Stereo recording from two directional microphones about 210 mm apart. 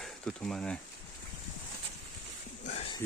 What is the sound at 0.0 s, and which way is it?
Speech, 5° left (ahead or behind).